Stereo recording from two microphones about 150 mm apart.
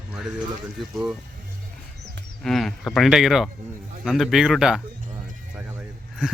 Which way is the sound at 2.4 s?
5° left (ahead or behind).